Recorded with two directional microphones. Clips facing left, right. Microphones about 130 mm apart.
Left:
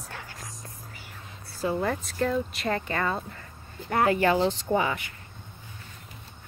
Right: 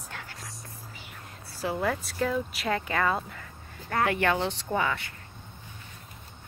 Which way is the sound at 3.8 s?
25° left (ahead or behind).